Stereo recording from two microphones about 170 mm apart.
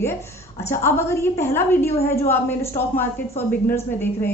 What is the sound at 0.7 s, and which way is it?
A woman's voice, 15° left (ahead or behind).